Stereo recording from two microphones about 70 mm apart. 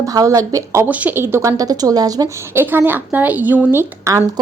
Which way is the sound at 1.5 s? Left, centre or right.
Right.